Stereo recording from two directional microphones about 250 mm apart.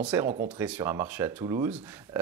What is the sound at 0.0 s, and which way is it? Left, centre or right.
Speech, centre.